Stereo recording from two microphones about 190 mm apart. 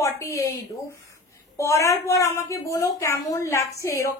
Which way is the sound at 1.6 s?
15° left (ahead or behind).